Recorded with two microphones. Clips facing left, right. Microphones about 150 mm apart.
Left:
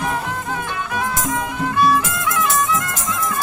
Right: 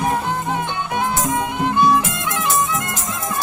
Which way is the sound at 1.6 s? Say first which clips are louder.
Right 1 dB; 20° right (ahead or behind).